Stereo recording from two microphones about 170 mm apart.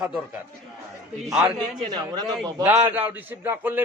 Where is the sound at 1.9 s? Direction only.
25° right (ahead or behind).